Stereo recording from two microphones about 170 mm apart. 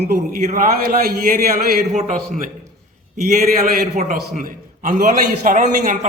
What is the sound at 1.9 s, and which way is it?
Speech, 40° right (ahead or behind).